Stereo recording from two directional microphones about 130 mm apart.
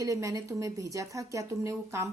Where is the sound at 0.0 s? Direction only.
25° right (ahead or behind).